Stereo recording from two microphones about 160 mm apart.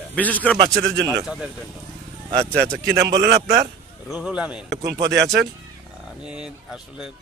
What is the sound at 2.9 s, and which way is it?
Speech, 90° right.